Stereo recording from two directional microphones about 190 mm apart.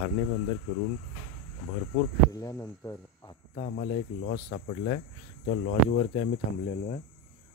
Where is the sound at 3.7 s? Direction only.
50° left (ahead or behind).